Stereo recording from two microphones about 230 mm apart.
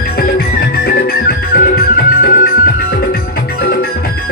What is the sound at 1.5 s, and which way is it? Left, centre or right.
Music, left.